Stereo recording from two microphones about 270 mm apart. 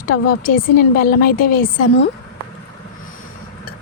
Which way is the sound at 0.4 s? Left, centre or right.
Left.